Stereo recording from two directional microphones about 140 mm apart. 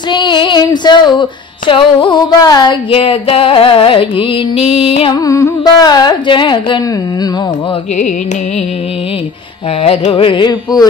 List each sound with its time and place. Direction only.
0.1 s music: 35° left (ahead or behind)
5.1 s carnatic music: 25° left (ahead or behind)
9.8 s music: 45° left (ahead or behind)